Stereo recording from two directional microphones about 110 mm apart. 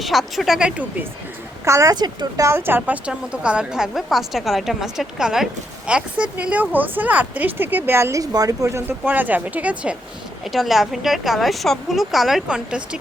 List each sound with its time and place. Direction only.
0.0 s a woman's voice: centre (ahead or behind)
1.6 s speech: 30° right (ahead or behind); by 9.9 s 15° right (ahead or behind)
10.5 s a woman's voice: centre (ahead or behind)